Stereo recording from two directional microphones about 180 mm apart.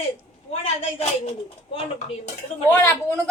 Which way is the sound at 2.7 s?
10° left (ahead or behind).